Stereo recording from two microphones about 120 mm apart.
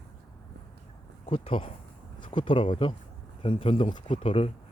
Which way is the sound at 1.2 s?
50° left (ahead or behind).